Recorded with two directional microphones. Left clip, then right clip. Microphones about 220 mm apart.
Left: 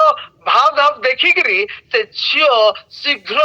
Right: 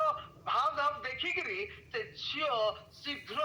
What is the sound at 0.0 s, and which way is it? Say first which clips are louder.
Telephone: left 19 dB; 40° left (ahead or behind).